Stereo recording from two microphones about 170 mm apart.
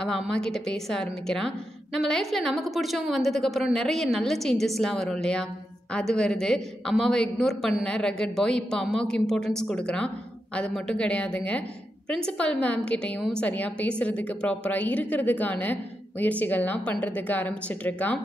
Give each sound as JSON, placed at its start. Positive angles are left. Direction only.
{"t": 0.0, "sound": "a woman's voice", "side_deg": 5}